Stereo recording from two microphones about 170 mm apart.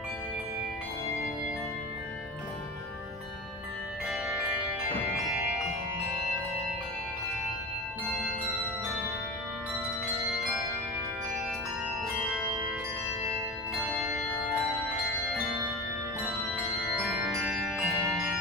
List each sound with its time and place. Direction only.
17.4 s music: 5° right (ahead or behind)